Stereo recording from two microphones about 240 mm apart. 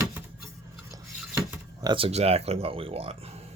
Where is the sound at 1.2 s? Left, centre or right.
Centre; by 3.4 s right.